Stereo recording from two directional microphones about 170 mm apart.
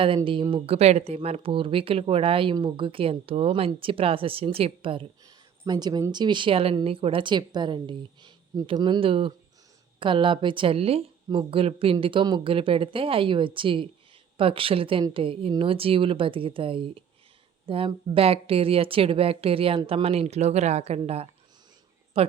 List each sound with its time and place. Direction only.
0.5 s a woman's voice: 35° right (ahead or behind)